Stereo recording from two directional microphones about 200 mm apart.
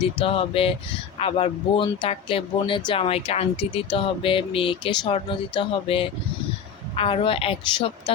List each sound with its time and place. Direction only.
0.0 s speech: 25° left (ahead or behind)